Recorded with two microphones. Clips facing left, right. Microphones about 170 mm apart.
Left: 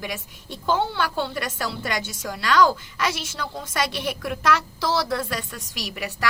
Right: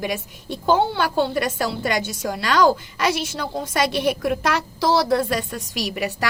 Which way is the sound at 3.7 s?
20° right (ahead or behind).